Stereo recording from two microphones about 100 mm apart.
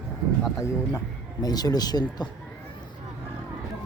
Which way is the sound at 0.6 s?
40° left (ahead or behind).